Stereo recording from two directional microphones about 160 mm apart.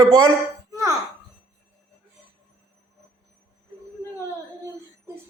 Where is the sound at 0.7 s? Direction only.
20° right (ahead or behind).